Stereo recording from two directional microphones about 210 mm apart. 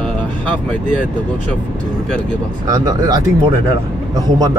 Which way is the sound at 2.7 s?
20° right (ahead or behind).